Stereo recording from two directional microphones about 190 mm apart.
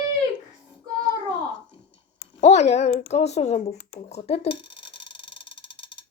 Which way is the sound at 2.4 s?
35° left (ahead or behind).